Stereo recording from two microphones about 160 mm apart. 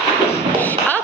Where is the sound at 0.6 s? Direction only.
10° left (ahead or behind).